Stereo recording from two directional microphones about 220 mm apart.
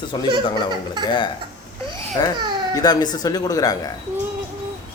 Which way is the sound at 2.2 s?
20° left (ahead or behind).